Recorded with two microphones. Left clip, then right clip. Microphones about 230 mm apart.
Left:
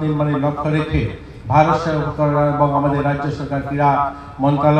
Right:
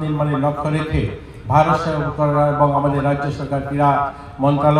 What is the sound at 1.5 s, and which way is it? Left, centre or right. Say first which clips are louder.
A man's voice: left 1 dB; right.